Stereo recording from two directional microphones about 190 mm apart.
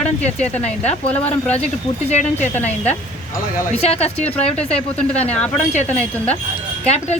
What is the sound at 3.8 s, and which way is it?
Speech, 35° left (ahead or behind).